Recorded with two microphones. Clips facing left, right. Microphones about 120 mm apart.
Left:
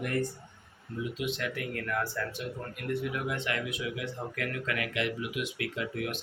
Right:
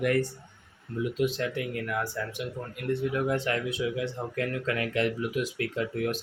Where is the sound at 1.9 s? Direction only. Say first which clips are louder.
Right 1 dB; 15° right (ahead or behind).